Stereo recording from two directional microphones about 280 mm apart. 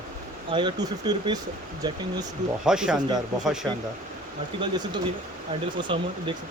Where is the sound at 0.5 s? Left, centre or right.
Centre.